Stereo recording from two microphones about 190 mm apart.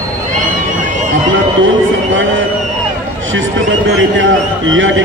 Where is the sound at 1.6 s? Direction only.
90° right.